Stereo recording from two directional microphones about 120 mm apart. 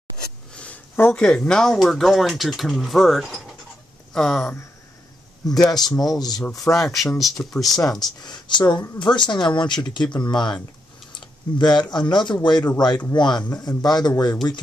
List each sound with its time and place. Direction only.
0.5 s speech: 10° left (ahead or behind)
6.1 s speech: 35° left (ahead or behind)
6.6 s speech: centre (ahead or behind)
8.2 s speech: 40° left (ahead or behind)
11.1 s a sound: 40° left (ahead or behind)
11.9 s speech: 35° left (ahead or behind)